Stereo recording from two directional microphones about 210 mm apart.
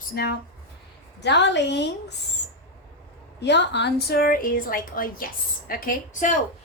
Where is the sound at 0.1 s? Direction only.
50° left (ahead or behind).